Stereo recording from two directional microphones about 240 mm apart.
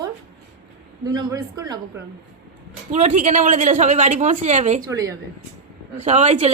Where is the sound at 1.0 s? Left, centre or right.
Centre.